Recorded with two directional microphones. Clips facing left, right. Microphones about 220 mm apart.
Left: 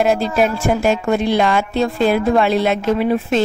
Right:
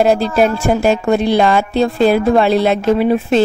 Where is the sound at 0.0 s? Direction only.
35° right (ahead or behind).